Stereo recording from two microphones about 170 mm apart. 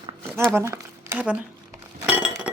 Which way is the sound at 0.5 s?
15° right (ahead or behind).